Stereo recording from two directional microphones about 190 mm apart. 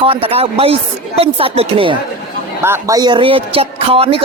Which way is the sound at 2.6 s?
15° right (ahead or behind).